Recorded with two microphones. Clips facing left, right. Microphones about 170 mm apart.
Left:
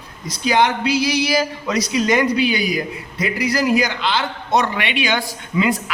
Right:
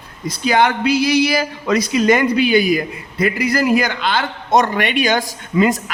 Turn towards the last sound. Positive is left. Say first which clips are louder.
# right 4 dB
turn(degrees=-45)  # may be behind; listen again after turning